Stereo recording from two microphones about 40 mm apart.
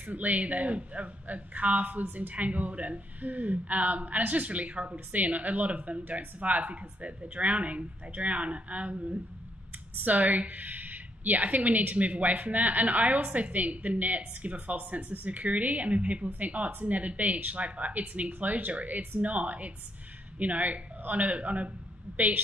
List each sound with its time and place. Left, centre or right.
0.0 s a woman's voice: right
10.0 s a woman's voice: right